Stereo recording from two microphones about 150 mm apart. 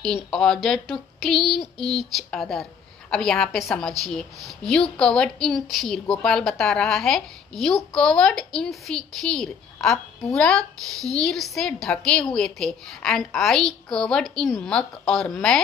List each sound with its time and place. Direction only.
0.3 s a woman's voice: 5° left (ahead or behind)